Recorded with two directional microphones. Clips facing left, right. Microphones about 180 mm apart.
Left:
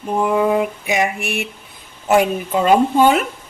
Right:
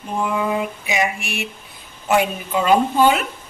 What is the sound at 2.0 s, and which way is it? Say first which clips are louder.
Speech: left 3 dB; 45° left (ahead or behind).